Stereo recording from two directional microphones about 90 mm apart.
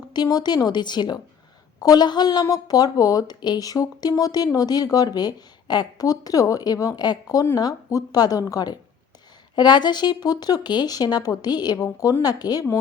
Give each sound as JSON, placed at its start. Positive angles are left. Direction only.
{"t": 0.1, "sound": "a woman's voice", "side_deg": 50}
{"t": 11.8, "sound": "a woman's voice", "side_deg": 35}